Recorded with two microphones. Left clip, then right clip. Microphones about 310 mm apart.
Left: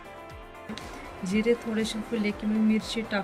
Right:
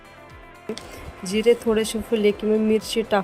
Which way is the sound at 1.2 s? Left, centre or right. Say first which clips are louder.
Right 8 dB; centre.